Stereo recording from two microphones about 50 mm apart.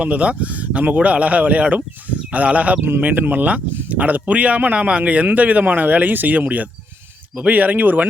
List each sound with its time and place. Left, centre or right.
0.0 s a man's voice: right